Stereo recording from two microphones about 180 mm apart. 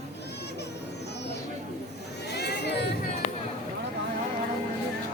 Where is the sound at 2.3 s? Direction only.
65° left (ahead or behind).